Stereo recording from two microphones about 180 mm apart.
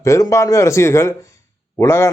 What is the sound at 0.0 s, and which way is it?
A man's voice, 15° left (ahead or behind).